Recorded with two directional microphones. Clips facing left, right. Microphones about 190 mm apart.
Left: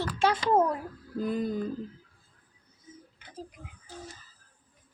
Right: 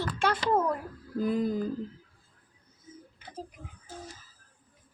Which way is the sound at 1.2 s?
Centre (ahead or behind).